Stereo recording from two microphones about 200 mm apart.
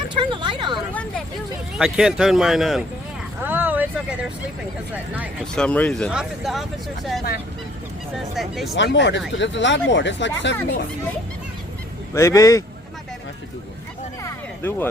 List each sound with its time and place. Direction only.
0.1 s speech: 25° right (ahead or behind)
1.8 s speech: 5° right (ahead or behind)
3.4 s vehicle: 10° right (ahead or behind)
5.5 s speech: 5° left (ahead or behind)
8.7 s speech: 60° left (ahead or behind)
12.1 s speech: 15° left (ahead or behind)
14.2 s a sound: 15° left (ahead or behind)